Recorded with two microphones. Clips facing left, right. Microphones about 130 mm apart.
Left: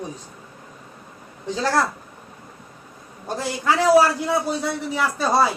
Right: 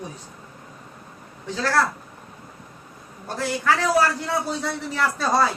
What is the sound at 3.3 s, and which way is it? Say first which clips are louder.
Speech: even; 20° left (ahead or behind).